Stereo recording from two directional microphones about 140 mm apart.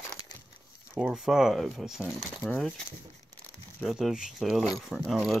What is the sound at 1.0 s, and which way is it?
Speech, 5° right (ahead or behind).